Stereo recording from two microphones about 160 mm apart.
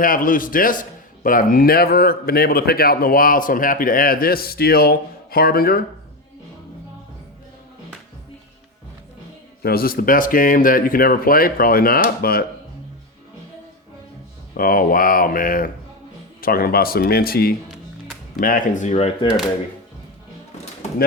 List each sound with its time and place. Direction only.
0.0 s a man's voice: 60° left (ahead or behind)
9.6 s a man's voice: 70° left (ahead or behind)
14.5 s a man's voice: 65° left (ahead or behind)
18.3 s speech: 60° left (ahead or behind); by 19.3 s 40° left (ahead or behind)